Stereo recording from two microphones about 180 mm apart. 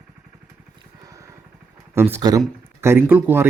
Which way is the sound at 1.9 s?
15° right (ahead or behind).